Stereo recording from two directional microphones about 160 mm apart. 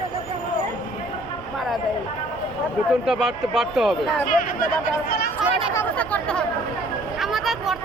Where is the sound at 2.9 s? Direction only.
5° right (ahead or behind).